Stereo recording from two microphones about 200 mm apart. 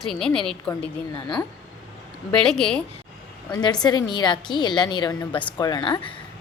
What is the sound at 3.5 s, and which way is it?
A woman's voice, 20° left (ahead or behind).